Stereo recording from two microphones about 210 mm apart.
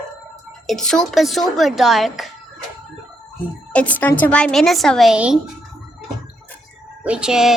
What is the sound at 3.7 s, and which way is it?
A woman's voice, 5° left (ahead or behind).